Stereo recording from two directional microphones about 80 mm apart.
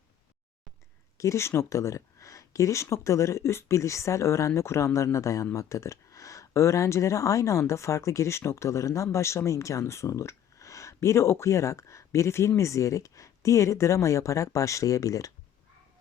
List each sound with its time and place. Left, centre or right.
1.2 s speech: left